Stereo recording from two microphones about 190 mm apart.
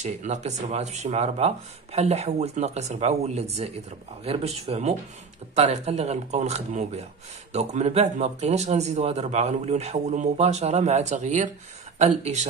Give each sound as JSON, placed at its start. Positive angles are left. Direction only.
{"t": 0.0, "sound": "speech", "side_deg": -35}